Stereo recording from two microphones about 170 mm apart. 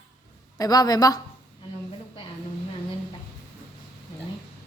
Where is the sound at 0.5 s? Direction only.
20° left (ahead or behind).